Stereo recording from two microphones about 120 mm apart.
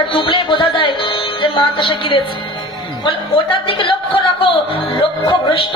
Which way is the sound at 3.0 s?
45° left (ahead or behind).